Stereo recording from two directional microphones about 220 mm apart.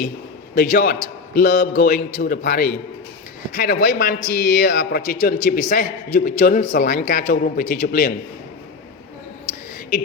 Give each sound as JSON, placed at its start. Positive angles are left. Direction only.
{"t": 0.5, "sound": "a man's voice", "side_deg": 40}